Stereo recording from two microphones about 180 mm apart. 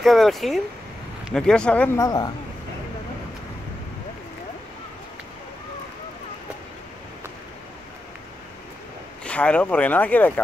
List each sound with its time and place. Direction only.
0.0 s speech: centre (ahead or behind)
2.0 s speech: 20° left (ahead or behind)
9.2 s speech: 5° left (ahead or behind)